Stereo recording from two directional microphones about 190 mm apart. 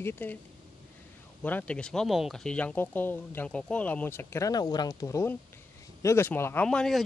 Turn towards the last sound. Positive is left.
turn(degrees=5)  # may be behind; listen again after turning